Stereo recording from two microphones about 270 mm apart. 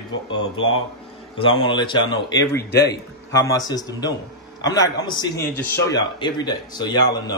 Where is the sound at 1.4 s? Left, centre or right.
Centre.